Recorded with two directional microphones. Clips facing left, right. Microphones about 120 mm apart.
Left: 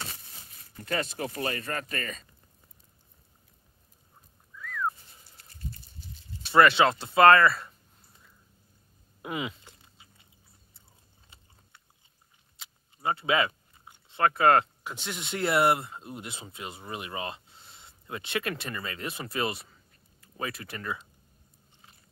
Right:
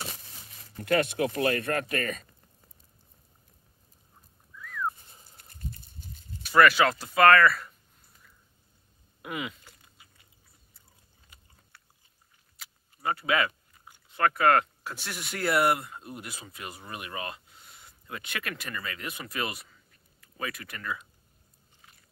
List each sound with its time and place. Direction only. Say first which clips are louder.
0.7 s speech: right 6 dB; 60° right (ahead or behind)
4.6 s a sound: left 1 dB; centre (ahead or behind)
6.4 s speech: left 1 dB; 25° left (ahead or behind)
9.2 s chewing: left 2 dB; 25° left (ahead or behind)
12.5 s speech: even; 25° left (ahead or behind)